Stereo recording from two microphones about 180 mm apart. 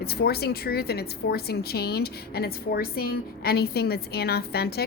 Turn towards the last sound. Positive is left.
turn(degrees=60)  # may be behind; listen again after turning